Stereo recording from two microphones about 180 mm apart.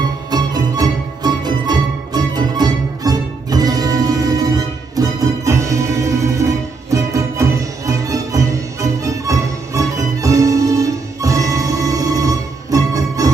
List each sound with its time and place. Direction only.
0.3 s music: 25° right (ahead or behind)